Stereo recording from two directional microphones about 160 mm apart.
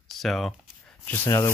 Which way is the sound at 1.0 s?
20° left (ahead or behind).